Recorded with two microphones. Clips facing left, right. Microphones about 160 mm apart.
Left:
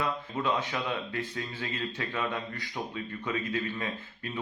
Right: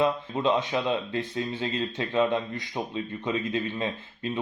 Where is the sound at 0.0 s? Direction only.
25° right (ahead or behind).